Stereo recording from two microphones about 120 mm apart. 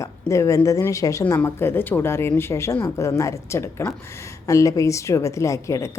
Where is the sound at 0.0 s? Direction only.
25° left (ahead or behind).